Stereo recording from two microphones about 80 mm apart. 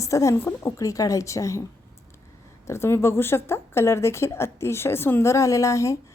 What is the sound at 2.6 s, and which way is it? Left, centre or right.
Speech, left.